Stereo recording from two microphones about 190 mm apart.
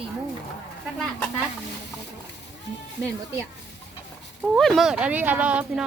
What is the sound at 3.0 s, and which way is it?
Speech, 15° right (ahead or behind).